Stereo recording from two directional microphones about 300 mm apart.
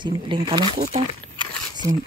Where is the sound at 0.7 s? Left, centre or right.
Centre.